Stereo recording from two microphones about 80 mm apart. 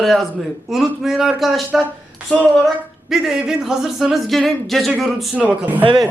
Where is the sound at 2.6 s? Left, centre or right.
Centre.